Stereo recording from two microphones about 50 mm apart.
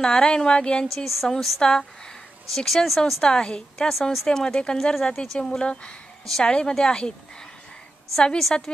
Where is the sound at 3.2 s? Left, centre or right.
Centre.